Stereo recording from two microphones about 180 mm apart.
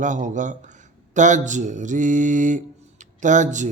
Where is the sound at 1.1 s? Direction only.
45° right (ahead or behind).